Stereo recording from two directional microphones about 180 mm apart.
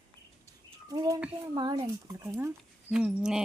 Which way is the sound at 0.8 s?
20° right (ahead or behind).